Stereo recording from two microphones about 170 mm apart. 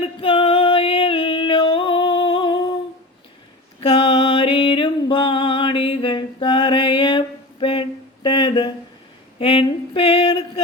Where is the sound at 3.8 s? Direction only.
35° left (ahead or behind).